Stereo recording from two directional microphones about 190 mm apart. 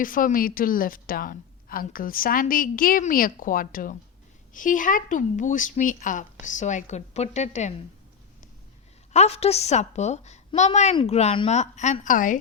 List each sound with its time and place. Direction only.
0.0 s a woman's voice: 45° left (ahead or behind)
9.1 s speech: 35° left (ahead or behind)